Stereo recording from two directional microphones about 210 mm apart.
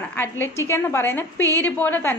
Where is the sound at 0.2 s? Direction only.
10° left (ahead or behind).